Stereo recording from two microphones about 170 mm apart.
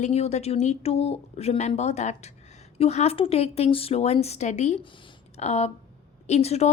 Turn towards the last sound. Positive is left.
turn(degrees=40)  # may be behind; listen again after turning